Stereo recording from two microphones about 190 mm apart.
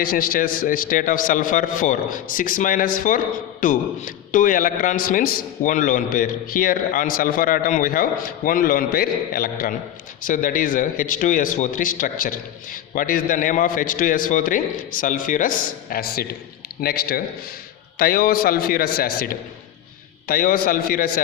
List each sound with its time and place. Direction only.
0.0 s a man's voice: 50° left (ahead or behind)